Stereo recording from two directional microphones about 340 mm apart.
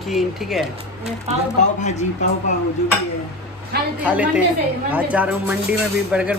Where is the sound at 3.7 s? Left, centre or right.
Right.